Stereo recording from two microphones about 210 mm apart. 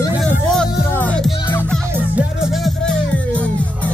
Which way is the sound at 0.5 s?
5° left (ahead or behind).